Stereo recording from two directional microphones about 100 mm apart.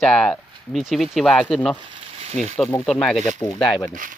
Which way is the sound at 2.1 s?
90° right.